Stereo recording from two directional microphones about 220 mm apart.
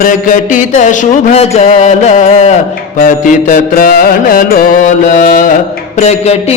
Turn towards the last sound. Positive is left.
turn(degrees=30)  # may be behind; listen again after turning